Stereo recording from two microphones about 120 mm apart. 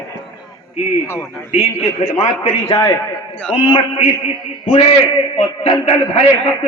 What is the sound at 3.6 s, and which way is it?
Speech, 55° left (ahead or behind).